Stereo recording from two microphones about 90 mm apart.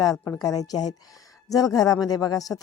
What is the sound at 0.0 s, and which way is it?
A woman's voice, 45° left (ahead or behind).